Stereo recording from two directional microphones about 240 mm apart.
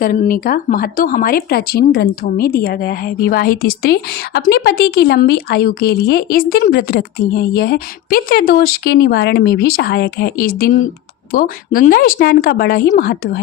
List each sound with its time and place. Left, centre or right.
0.0 s speech: left